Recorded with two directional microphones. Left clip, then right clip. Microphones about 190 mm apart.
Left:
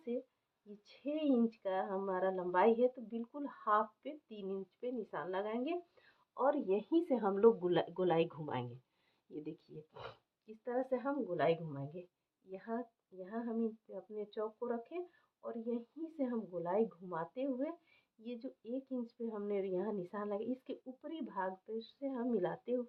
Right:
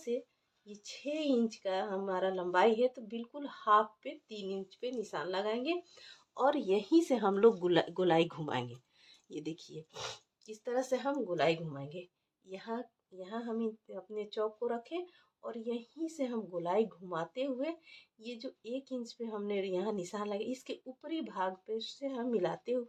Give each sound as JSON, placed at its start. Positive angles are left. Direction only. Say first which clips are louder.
{"t": 0.1, "sound": "speech", "louder": "right 5 dB", "side_deg": -25}